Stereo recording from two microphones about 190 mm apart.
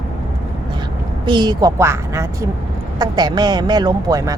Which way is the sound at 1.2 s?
20° right (ahead or behind).